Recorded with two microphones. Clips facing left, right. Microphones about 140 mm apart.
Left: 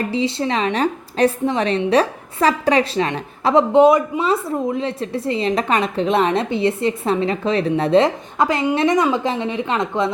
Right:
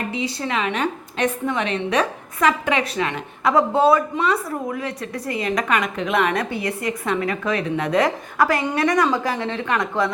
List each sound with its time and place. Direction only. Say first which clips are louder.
0.1 s a woman's voice: left 5 dB; 30° left (ahead or behind)